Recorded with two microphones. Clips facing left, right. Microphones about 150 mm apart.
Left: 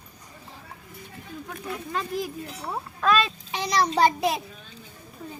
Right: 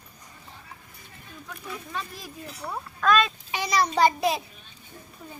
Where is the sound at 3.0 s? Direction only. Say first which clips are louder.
Even; 30° left (ahead or behind).